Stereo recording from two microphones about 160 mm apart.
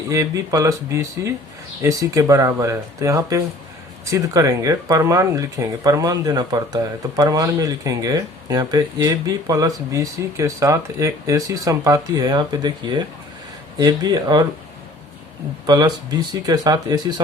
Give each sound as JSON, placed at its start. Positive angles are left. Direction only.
{"t": 0.1, "sound": "speech", "side_deg": -20}
{"t": 13.7, "sound": "speech", "side_deg": -25}
{"t": 15.6, "sound": "speech", "side_deg": -25}